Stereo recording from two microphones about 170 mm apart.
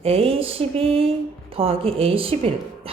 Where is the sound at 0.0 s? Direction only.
35° right (ahead or behind).